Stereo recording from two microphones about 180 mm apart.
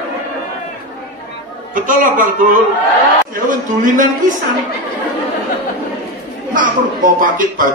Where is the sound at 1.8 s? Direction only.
50° right (ahead or behind).